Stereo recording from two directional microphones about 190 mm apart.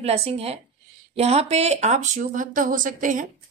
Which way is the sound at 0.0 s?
35° right (ahead or behind).